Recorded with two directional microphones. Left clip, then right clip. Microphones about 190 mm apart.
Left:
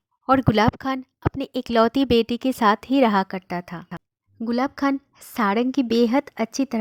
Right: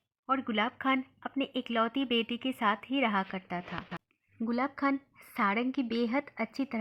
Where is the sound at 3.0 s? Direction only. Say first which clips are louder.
Left 10 dB; 50° left (ahead or behind).